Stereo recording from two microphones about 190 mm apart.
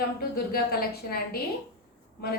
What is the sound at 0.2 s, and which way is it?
A woman's voice, 55° left (ahead or behind).